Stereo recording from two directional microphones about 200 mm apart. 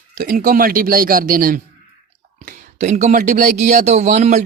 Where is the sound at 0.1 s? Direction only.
45° right (ahead or behind).